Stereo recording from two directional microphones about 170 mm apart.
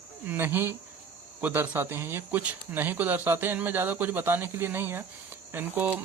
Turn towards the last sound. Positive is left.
turn(degrees=-10)  # may be behind; listen again after turning